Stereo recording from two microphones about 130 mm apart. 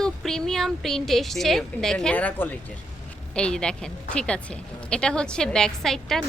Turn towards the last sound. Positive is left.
turn(degrees=5)  # may be behind; listen again after turning